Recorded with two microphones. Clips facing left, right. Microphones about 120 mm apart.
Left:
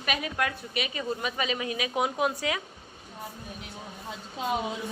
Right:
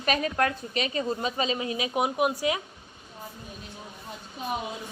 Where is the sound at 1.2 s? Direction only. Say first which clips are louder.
Right 2 dB; 25° right (ahead or behind).